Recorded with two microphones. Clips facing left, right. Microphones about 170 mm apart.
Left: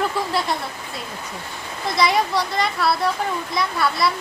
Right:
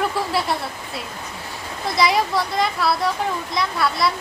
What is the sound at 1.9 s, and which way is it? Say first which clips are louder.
Speech: even; centre (ahead or behind).